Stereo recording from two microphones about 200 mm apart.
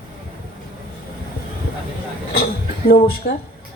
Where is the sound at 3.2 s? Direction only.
55° left (ahead or behind).